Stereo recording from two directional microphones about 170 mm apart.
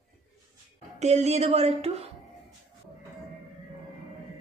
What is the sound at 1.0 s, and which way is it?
Speech, 40° right (ahead or behind).